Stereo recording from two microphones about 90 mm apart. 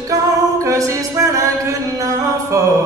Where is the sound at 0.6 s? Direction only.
35° right (ahead or behind).